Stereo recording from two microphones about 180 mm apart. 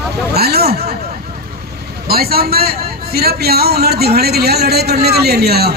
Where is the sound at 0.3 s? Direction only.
60° right (ahead or behind).